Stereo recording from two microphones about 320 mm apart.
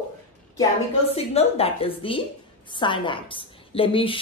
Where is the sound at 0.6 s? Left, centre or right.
Centre.